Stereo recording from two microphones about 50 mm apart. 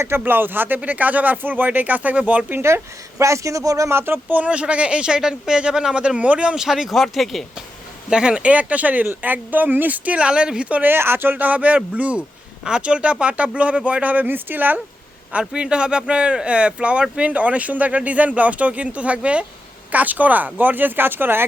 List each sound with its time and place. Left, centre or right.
0.3 s speech: right
2.6 s speech: right
4.0 s speech: right
4.4 s speech: right
6.6 s speech: centre
8.1 s speech: centre
10.8 s speech: right
15.3 s speech: right